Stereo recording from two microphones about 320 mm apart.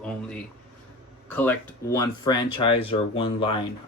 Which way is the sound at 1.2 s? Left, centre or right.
Centre.